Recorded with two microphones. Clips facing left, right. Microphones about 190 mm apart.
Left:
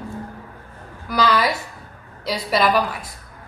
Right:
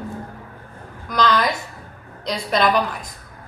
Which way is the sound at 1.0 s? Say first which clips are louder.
Even; 5° left (ahead or behind).